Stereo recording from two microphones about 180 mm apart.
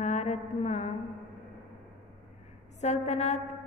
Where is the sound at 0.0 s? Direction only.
40° left (ahead or behind).